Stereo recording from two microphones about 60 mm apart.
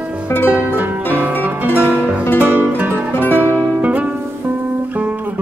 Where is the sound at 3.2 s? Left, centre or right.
Left.